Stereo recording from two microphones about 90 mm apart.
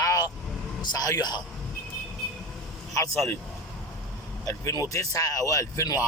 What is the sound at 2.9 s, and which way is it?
Speech, 30° left (ahead or behind).